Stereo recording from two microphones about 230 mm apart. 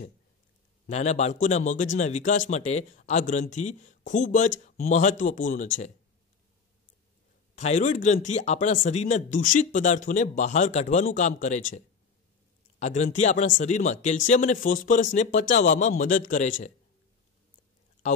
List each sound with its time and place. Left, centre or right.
0.8 s a man's voice: left
7.5 s a man's voice: left
12.7 s a man's voice: left